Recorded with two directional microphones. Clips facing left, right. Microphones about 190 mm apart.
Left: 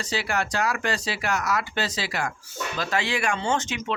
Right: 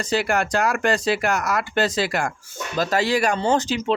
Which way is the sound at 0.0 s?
50° right (ahead or behind).